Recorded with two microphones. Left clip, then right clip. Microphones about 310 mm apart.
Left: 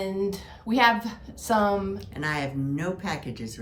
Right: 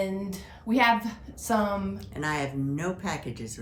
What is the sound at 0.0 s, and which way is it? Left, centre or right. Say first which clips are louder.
A woman's voice: left 3 dB; centre.